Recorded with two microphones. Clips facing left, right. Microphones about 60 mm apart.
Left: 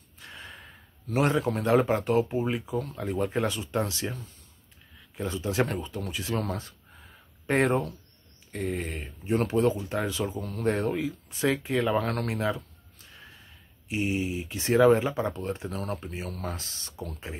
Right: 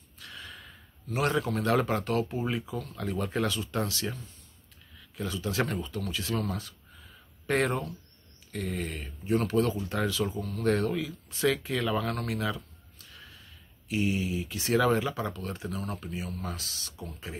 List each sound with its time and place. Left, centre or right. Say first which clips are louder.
0.2 s snort: left 1 dB; left
1.1 s speech: left 3 dB; left
17.3 s speech: left 1 dB; left